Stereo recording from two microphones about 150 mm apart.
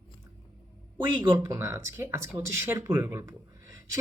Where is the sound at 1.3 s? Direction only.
20° right (ahead or behind).